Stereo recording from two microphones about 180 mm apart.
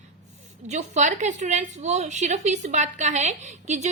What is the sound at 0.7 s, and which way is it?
A woman's voice, 40° right (ahead or behind).